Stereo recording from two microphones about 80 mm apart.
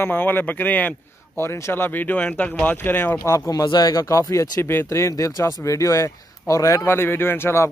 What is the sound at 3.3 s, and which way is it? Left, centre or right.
Speech, left.